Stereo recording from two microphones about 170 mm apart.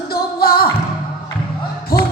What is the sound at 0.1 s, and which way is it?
Music, 60° left (ahead or behind).